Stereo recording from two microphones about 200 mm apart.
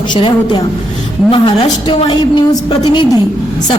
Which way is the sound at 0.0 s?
25° left (ahead or behind).